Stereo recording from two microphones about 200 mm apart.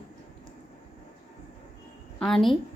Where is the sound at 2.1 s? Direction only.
Centre (ahead or behind).